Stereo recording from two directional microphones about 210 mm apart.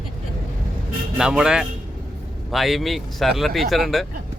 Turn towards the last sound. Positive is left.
turn(degrees=0)  # may be behind; listen again after turning